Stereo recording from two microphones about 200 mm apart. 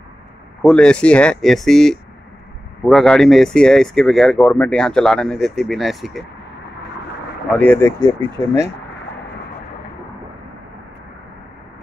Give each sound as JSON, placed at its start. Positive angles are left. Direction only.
{"t": 0.6, "sound": "speech", "side_deg": 5}
{"t": 7.5, "sound": "speech", "side_deg": 10}
{"t": 8.0, "sound": "speech", "side_deg": 20}